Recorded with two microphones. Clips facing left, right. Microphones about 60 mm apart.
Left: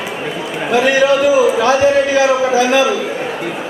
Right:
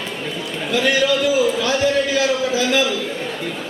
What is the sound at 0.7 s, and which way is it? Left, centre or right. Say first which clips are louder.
A man's voice: left 6 dB; centre.